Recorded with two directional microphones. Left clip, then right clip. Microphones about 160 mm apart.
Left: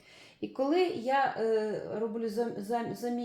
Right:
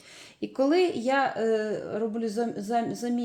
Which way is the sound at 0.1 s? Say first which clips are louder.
Right 4 dB; 50° right (ahead or behind).